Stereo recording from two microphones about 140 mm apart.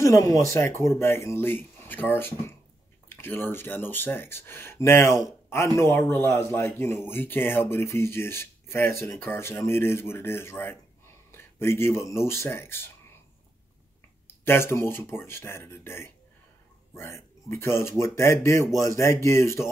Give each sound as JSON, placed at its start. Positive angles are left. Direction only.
{"t": 0.0, "sound": "speech", "side_deg": 25}
{"t": 14.2, "sound": "speech", "side_deg": 15}